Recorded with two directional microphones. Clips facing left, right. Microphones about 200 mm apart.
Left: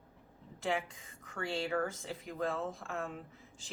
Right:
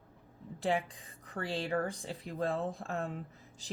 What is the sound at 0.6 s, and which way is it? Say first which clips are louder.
A woman's voice: right 3 dB; 35° right (ahead or behind).